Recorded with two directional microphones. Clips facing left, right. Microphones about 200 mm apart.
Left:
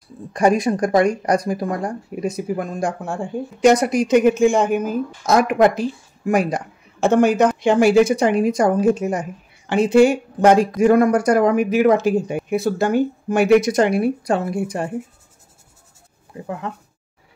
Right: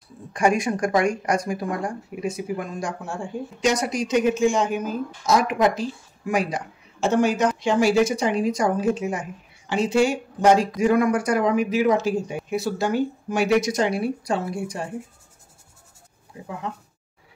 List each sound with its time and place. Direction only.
0.3 s a woman's voice: 35° left (ahead or behind)
9.7 s a woman's voice: 55° left (ahead or behind)
16.3 s speech: 50° left (ahead or behind)